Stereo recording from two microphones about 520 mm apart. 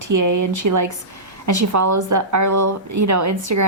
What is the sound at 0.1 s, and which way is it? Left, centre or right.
A woman's voice, right.